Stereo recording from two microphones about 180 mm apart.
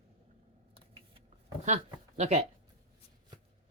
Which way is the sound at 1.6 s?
40° right (ahead or behind).